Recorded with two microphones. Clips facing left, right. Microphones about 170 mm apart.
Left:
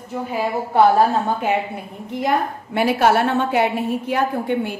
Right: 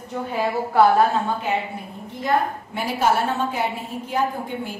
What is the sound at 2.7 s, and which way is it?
A woman's voice, 70° left (ahead or behind).